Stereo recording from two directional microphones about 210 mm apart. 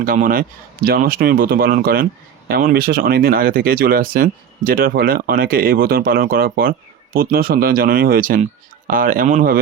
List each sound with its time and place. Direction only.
0.0 s speech: 40° right (ahead or behind)